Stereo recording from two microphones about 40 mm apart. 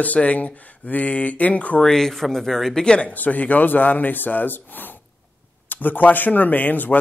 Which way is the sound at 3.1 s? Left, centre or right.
Left.